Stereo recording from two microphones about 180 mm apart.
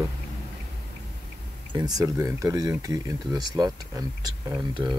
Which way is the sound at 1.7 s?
20° right (ahead or behind).